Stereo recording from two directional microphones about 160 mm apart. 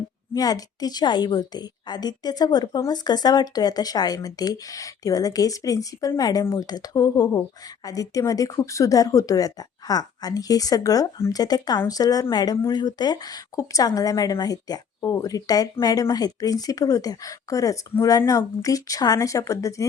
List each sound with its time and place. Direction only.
0.3 s speech: 25° left (ahead or behind)